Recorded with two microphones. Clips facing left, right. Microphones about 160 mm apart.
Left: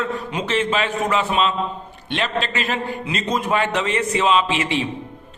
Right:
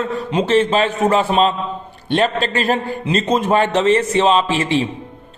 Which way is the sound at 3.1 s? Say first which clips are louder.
Right 6 dB; 30° right (ahead or behind).